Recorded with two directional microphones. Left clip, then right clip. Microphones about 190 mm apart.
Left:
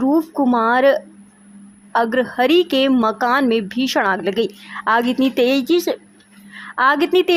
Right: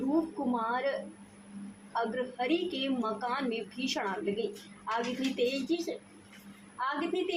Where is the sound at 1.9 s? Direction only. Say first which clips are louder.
Left 16 dB; 75° left (ahead or behind).